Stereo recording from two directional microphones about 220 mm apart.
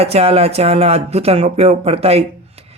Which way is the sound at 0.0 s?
25° right (ahead or behind).